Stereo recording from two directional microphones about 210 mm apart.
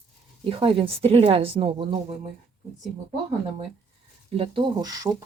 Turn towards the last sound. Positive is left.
turn(degrees=-15)  # may be behind; listen again after turning